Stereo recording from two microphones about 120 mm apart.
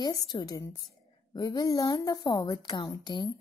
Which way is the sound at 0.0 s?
35° left (ahead or behind).